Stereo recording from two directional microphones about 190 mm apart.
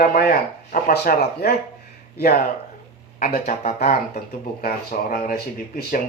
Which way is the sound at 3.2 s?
50° left (ahead or behind).